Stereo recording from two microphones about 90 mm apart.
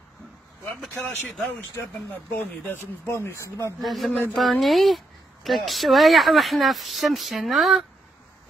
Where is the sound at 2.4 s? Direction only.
25° left (ahead or behind).